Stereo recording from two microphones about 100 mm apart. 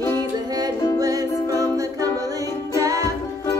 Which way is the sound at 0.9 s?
40° right (ahead or behind).